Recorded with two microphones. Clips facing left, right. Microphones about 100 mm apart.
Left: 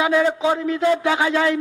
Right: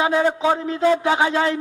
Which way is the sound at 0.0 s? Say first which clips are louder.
Even; 30° right (ahead or behind).